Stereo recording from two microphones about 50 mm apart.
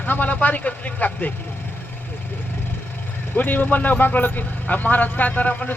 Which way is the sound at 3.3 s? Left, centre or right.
Left.